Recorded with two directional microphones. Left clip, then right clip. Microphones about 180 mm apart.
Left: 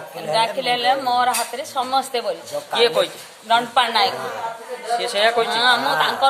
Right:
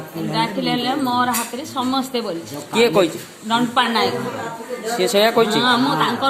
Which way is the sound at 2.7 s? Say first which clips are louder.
Right 2 dB; 15° right (ahead or behind).